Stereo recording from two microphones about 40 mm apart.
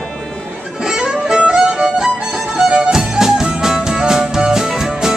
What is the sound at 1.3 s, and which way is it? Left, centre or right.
Music, centre.